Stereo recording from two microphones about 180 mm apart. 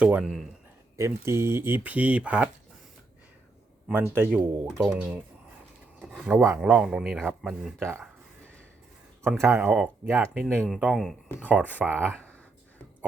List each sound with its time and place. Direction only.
0.0 s a man's voice: 5° right (ahead or behind)
0.9 s speech: 15° right (ahead or behind)
3.9 s speech: 10° right (ahead or behind)
6.2 s speech: 15° right (ahead or behind)
6.6 s a man's voice: 5° right (ahead or behind)
7.8 s speech: 15° right (ahead or behind)
9.2 s a man's voice: 15° right (ahead or behind)
11.6 s speech: 10° left (ahead or behind)
11.9 s speech: 10° right (ahead or behind)
12.1 s a sound: 10° left (ahead or behind)